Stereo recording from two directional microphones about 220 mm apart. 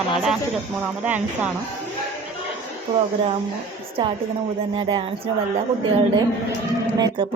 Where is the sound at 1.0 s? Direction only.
5° right (ahead or behind).